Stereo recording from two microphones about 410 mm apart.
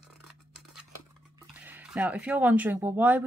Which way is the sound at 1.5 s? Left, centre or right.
Centre.